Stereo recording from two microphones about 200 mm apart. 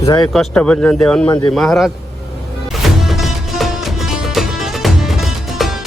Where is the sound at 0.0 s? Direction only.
20° left (ahead or behind).